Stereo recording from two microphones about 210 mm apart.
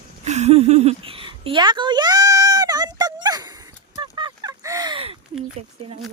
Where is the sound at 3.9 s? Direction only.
20° right (ahead or behind).